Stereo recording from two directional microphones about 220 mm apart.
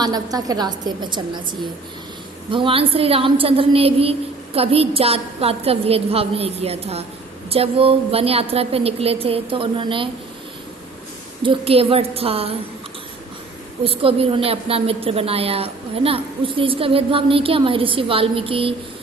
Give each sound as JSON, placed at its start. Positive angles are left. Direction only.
{"t": 0.0, "sound": "a woman's voice", "side_deg": -15}
{"t": 2.5, "sound": "a woman's voice", "side_deg": -25}
{"t": 11.4, "sound": "a woman's voice", "side_deg": -25}
{"t": 13.8, "sound": "a woman's voice", "side_deg": -25}